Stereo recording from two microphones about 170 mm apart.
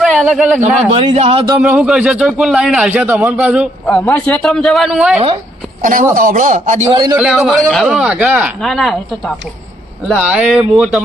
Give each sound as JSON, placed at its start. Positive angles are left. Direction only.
{"t": 0.0, "sound": "a sound", "side_deg": 0}
{"t": 0.9, "sound": "speech", "side_deg": -35}
{"t": 1.6, "sound": "a man's voice", "side_deg": -5}
{"t": 5.8, "sound": "speech", "side_deg": -50}
{"t": 7.2, "sound": "a man's voice", "side_deg": 0}